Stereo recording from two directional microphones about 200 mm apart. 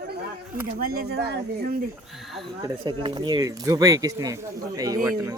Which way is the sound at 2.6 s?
25° right (ahead or behind).